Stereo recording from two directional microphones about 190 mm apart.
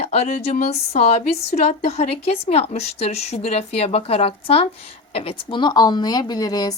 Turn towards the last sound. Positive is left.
turn(degrees=20)  # may be behind; listen again after turning